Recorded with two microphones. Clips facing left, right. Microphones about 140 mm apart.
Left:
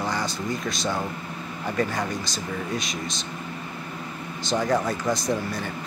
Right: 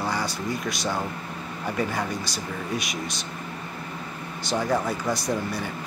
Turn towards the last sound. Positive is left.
turn(degrees=-10)  # may be behind; listen again after turning